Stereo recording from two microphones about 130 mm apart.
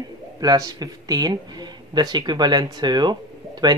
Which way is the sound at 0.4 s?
30° right (ahead or behind).